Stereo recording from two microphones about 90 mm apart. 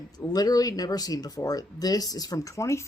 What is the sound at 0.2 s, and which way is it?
Speech, 45° left (ahead or behind).